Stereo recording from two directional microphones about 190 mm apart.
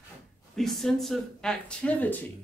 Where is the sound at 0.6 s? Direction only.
Centre (ahead or behind).